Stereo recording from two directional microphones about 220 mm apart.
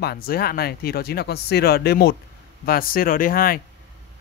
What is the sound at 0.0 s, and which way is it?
Speech, 45° left (ahead or behind).